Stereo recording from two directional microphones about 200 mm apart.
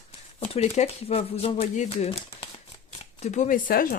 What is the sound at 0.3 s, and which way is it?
Speech, 30° left (ahead or behind).